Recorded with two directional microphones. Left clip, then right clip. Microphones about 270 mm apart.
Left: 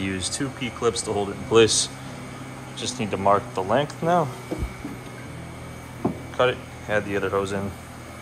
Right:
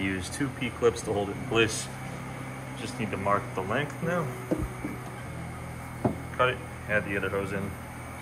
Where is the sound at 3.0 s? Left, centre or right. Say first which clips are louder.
Left 7 dB; centre.